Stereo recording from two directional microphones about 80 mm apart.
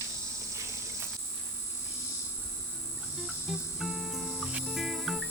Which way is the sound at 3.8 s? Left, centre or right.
Centre.